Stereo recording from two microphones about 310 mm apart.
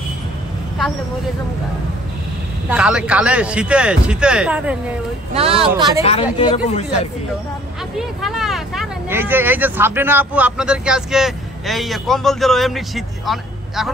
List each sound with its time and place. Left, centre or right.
2.7 s speech: centre
5.3 s speech: centre
6.3 s a man's voice: centre
8.0 s speech: centre